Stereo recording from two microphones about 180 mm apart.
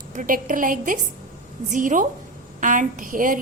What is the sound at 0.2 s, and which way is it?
A woman's voice, 45° right (ahead or behind).